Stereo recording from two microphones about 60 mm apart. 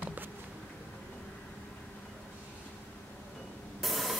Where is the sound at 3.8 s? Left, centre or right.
Centre.